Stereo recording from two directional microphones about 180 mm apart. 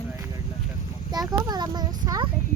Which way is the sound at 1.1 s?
25° right (ahead or behind).